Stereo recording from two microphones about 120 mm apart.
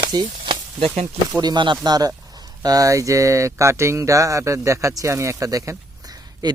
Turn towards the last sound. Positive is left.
turn(degrees=-35)  # may be behind; listen again after turning